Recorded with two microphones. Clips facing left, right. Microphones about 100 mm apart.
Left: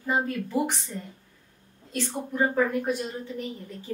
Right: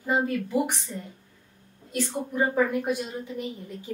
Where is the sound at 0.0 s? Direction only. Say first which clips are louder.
Right 2 dB; 10° right (ahead or behind).